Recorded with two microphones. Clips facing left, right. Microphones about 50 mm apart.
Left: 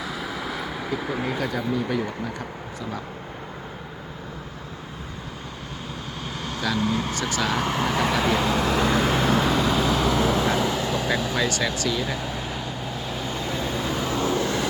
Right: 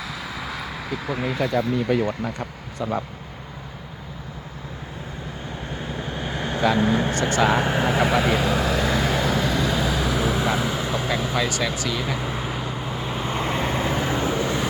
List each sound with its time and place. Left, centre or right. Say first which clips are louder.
0.0 s vehicle: left 1 dB; centre
1.5 s speech: right 4 dB; right
6.1 s vehicle: right 5 dB; right
7.1 s speech: right 5 dB; right
7.4 s vehicle: right 3 dB; right
11.3 s speech: right 1 dB; centre
12.1 s vehicle: right 2 dB; centre